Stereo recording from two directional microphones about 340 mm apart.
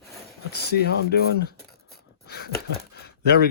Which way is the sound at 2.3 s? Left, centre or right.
Left.